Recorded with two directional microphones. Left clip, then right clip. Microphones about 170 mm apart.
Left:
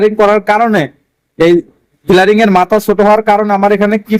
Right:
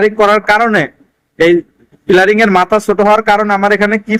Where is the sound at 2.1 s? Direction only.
60° left (ahead or behind); by 2.7 s 45° left (ahead or behind).